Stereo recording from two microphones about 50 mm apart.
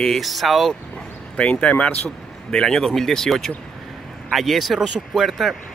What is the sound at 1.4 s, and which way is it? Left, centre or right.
Speech, left.